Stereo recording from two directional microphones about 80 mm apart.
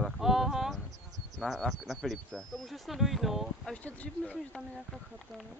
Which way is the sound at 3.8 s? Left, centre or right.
Centre.